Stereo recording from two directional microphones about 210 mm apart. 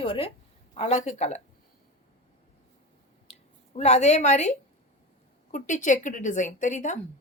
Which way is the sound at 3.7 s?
35° left (ahead or behind).